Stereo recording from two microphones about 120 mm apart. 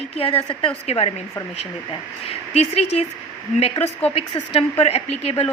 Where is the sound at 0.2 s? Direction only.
50° left (ahead or behind).